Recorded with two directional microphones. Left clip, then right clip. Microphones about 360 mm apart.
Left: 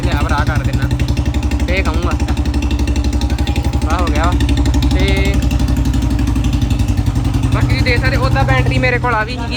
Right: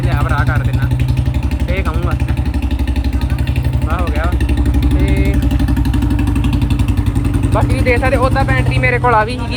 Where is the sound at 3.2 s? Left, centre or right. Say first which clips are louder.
Left 3 dB; left.